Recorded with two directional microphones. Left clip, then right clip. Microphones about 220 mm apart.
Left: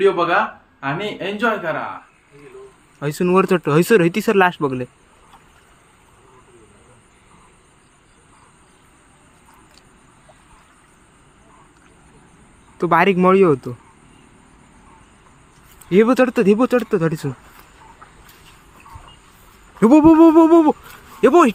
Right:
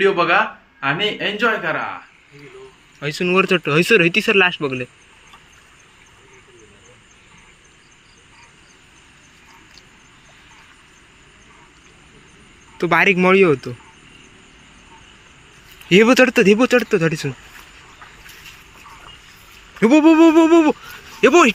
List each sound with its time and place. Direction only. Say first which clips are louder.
0.0 s speech: right 1 dB; centre (ahead or behind)
3.0 s speech: left 1 dB; 30° left (ahead or behind)
12.7 s speech: even; 15° left (ahead or behind)
15.9 s speech: right 2 dB; 5° right (ahead or behind); by 17.3 s 15° left (ahead or behind)
19.8 s speech: left 1 dB; 25° left (ahead or behind)